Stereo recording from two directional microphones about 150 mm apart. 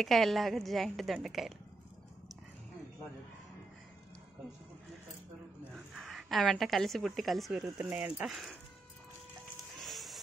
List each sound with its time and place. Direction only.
0.0 s a woman's voice: centre (ahead or behind)
5.9 s a woman's voice: centre (ahead or behind)
7.6 s speech: 25° right (ahead or behind)
8.1 s a woman's voice: centre (ahead or behind)
9.8 s music: centre (ahead or behind)